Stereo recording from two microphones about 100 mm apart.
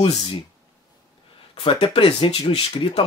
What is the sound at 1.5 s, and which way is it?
Speech, 70° left (ahead or behind).